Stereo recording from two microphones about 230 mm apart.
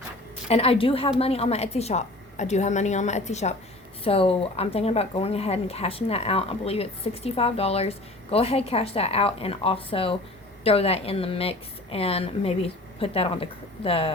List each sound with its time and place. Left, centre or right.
0.4 s speech: left